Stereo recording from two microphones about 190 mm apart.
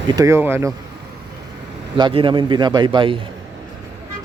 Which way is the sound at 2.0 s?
25° right (ahead or behind).